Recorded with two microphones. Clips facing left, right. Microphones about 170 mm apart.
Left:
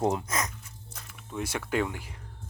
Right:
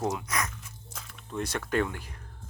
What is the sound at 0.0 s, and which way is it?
Speech, 20° left (ahead or behind).